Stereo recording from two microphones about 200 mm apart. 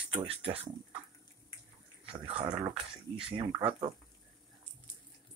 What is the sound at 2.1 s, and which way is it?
Speech, 25° right (ahead or behind).